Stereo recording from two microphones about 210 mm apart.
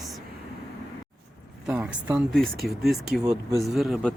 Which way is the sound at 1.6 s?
5° right (ahead or behind).